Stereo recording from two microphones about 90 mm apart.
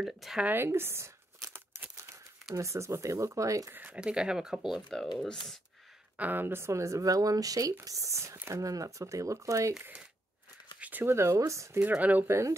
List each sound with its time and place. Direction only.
0.0 s speech: centre (ahead or behind)
0.4 s speech: 25° right (ahead or behind)
3.7 s speech: 15° right (ahead or behind)
4.8 s speech: 5° left (ahead or behind)
6.1 s speech: 20° right (ahead or behind); by 9.8 s 35° right (ahead or behind)
9.8 s speech: 15° right (ahead or behind); by 11.8 s 35° right (ahead or behind)
11.8 s speech: 15° right (ahead or behind)
12.3 s speech: 30° right (ahead or behind)